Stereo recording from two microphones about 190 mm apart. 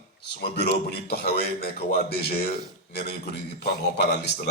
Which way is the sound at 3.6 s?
60° left (ahead or behind).